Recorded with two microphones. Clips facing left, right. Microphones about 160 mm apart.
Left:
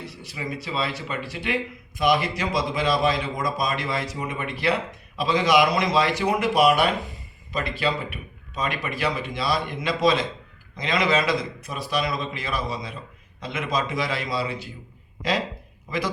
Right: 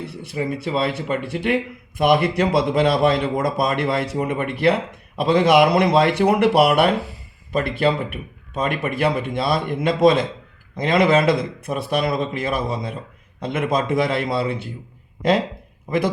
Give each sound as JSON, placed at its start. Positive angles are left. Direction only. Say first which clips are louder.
{"t": 0.0, "sound": "a man's voice", "louder": "right 8 dB", "side_deg": -55}